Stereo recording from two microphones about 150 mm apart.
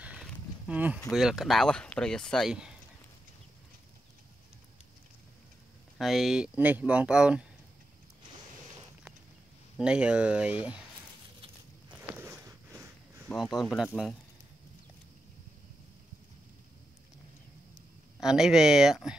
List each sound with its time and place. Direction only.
0.0 s livestock: 5° right (ahead or behind)
1.1 s speech: centre (ahead or behind)
5.9 s speech: centre (ahead or behind)
9.8 s speech: 5° right (ahead or behind)
11.9 s walk: 10° right (ahead or behind)
12.3 s a sound: 15° right (ahead or behind)
13.3 s speech: centre (ahead or behind)
18.2 s speech: 5° right (ahead or behind)